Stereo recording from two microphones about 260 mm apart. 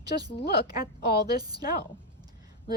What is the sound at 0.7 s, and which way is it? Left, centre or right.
Speech, left.